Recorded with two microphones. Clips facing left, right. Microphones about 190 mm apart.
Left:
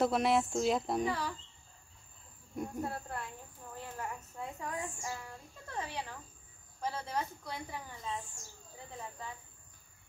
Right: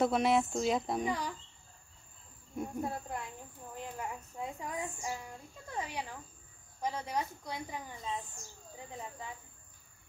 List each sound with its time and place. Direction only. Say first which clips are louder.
0.0 s speech: right 1 dB; centre (ahead or behind)
1.0 s a woman's voice: even; 15° right (ahead or behind)
2.8 s a woman's voice: right 1 dB; 15° right (ahead or behind)
3.7 s a sound: right 1 dB; 15° right (ahead or behind)
6.8 s a woman's voice: right 1 dB; 15° right (ahead or behind)